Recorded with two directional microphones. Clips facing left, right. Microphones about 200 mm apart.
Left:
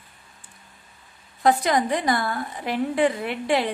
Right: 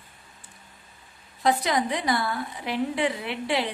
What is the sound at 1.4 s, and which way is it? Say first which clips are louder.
A woman's voice: left 3 dB; 50° left (ahead or behind).